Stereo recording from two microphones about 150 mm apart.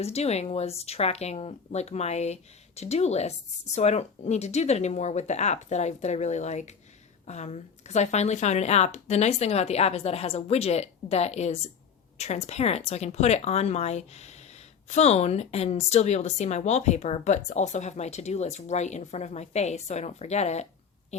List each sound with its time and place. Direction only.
0.0 s speech: 45° left (ahead or behind)